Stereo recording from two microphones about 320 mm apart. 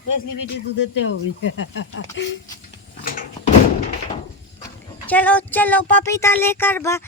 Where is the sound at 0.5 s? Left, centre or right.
Left.